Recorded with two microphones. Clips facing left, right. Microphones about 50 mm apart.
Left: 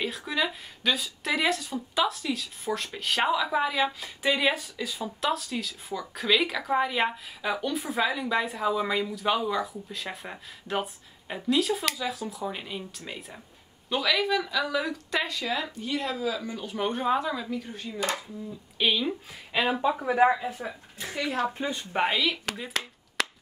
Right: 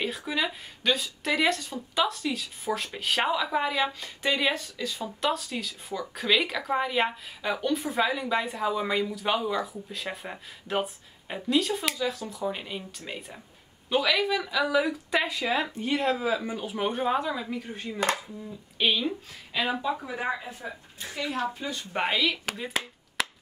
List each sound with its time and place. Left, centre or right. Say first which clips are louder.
0.0 s speech: even; centre
15.8 s speech: right 3 dB; right; by 17.5 s centre
18.8 s speech: even; centre
19.5 s speech: left 3 dB; left
20.1 s speech: left 9 dB; left
21.5 s speech: left 3 dB; left
21.9 s speech: even; centre